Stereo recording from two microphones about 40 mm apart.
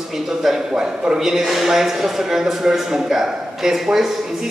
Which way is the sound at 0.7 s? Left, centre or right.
Right.